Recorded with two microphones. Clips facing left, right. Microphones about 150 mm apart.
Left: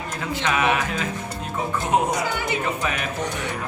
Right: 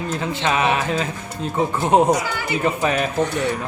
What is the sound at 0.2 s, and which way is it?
Speech, 25° right (ahead or behind).